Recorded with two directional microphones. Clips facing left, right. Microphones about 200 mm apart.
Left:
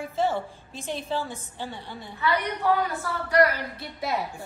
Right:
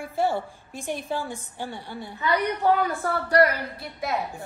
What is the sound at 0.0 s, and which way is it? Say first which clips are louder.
A woman's voice: right 1 dB; 15° right (ahead or behind).